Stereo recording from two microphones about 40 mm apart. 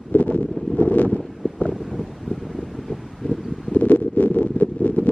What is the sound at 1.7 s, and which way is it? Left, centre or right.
Wind, centre.